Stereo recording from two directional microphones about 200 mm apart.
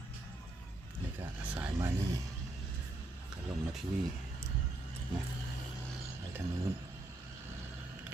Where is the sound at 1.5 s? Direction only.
5° right (ahead or behind).